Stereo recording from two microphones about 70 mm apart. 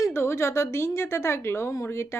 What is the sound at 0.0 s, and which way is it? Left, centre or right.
Speech, left.